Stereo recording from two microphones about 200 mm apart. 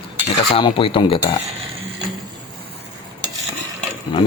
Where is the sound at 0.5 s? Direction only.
25° left (ahead or behind).